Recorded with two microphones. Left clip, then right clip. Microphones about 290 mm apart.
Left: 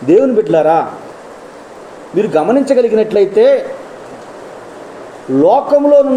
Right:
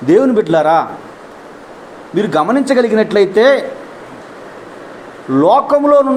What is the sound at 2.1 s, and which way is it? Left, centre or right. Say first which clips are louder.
Speech: left 2 dB; centre.